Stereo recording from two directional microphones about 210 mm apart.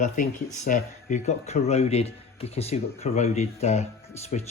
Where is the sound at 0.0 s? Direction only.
35° left (ahead or behind).